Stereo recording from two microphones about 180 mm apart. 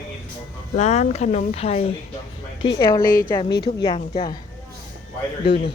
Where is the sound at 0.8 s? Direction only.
40° left (ahead or behind); by 3.1 s 20° left (ahead or behind).